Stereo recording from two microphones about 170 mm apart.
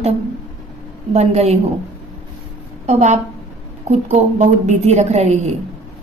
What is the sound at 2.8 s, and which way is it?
A woman's voice, 40° right (ahead or behind).